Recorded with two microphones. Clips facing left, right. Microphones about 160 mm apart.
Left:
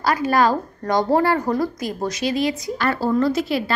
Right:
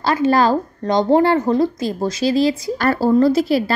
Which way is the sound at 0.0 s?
25° right (ahead or behind).